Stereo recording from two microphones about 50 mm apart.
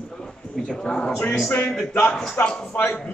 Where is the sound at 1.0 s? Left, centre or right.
Left.